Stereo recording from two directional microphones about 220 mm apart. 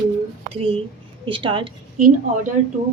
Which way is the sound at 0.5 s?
25° right (ahead or behind).